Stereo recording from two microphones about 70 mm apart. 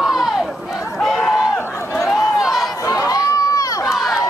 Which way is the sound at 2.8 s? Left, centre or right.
Left.